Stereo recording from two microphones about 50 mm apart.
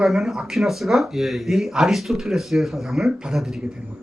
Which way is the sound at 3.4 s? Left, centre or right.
Centre.